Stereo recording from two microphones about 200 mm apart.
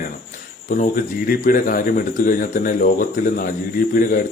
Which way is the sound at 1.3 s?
45° left (ahead or behind).